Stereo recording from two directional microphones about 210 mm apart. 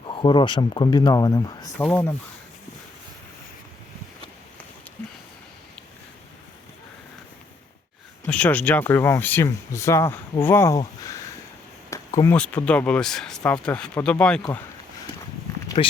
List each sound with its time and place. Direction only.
0.1 s speech: 20° left (ahead or behind)
8.3 s speech: 5° left (ahead or behind)
15.8 s speech: 30° left (ahead or behind)